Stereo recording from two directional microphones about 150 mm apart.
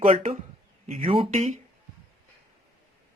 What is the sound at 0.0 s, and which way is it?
Speech, 35° right (ahead or behind).